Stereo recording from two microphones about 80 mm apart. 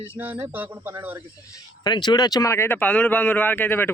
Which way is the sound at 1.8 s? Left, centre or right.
Left.